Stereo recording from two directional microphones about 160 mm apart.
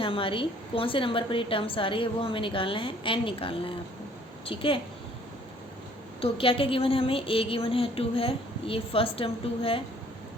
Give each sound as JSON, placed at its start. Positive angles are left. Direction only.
{"t": 0.0, "sound": "a woman's voice", "side_deg": 35}
{"t": 6.2, "sound": "a woman's voice", "side_deg": 35}